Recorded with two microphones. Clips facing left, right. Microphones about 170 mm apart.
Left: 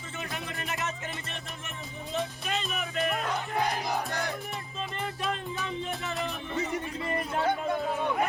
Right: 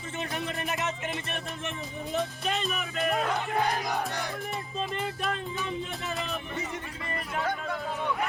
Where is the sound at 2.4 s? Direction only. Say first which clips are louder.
Right 2 dB; 40° right (ahead or behind).